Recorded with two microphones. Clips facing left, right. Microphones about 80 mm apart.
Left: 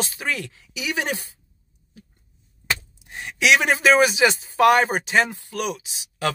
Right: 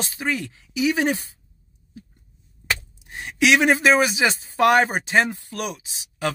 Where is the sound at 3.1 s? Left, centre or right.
Right.